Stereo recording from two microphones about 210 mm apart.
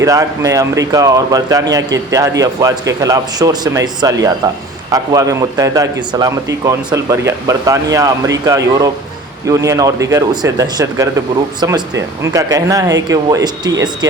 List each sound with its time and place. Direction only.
0.0 s speech: 15° right (ahead or behind)